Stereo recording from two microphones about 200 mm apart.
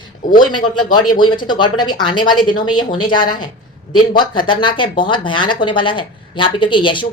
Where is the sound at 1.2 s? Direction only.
25° left (ahead or behind).